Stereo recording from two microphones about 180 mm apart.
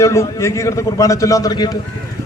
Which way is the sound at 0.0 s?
15° left (ahead or behind).